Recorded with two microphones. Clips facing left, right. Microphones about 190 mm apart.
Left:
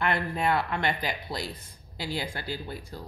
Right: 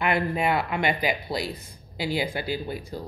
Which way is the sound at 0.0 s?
10° right (ahead or behind).